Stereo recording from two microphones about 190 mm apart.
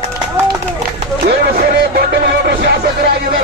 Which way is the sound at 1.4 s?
55° right (ahead or behind).